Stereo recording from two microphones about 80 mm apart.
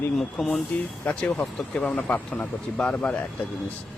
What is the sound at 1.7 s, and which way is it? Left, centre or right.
Speech, centre.